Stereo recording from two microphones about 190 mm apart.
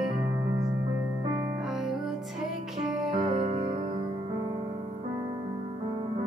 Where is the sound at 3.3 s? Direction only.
40° right (ahead or behind).